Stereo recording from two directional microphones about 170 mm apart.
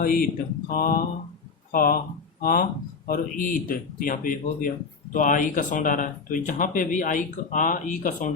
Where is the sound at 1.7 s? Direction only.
55° left (ahead or behind).